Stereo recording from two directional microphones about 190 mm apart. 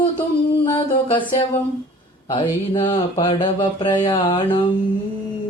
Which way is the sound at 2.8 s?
25° left (ahead or behind).